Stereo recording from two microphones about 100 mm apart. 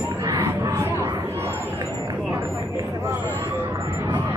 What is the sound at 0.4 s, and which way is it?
Crowd, 30° right (ahead or behind).